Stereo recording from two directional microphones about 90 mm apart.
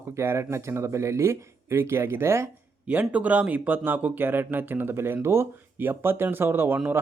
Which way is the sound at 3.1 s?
15° right (ahead or behind).